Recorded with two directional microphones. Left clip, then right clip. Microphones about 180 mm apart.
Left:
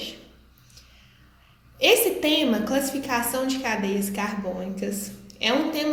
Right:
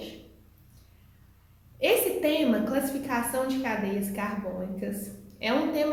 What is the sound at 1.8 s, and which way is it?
A woman's voice, 45° left (ahead or behind).